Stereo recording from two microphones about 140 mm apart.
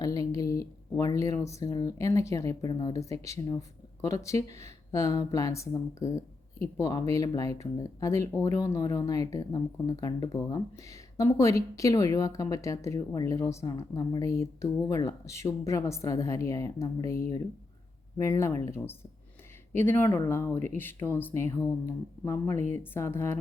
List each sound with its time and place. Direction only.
0.0 s speech: 25° left (ahead or behind)
18.2 s speech: 20° left (ahead or behind)